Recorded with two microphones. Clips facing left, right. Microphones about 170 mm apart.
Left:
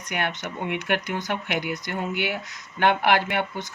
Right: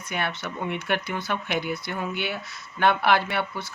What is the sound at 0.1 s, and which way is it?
Speech, 15° left (ahead or behind).